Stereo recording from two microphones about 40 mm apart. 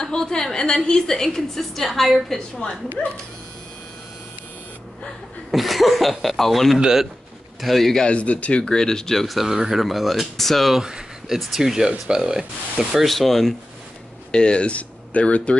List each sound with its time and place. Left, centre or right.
0.0 s a woman's voice: centre
5.5 s speech: centre
6.8 s speech: centre
7.6 s speech: centre
8.1 s speech: left
8.6 s a woman's voice: centre
9.5 s speech: centre
10.8 s a sound: centre
11.3 s speech: centre
13.0 s speech: centre
14.3 s speech: left